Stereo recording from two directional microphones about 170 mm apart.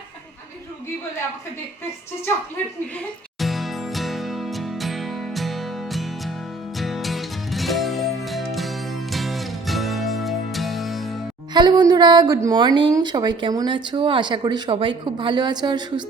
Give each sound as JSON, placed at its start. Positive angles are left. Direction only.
{"t": 3.4, "sound": "music", "side_deg": 0}
{"t": 11.5, "sound": "a woman's voice", "side_deg": -25}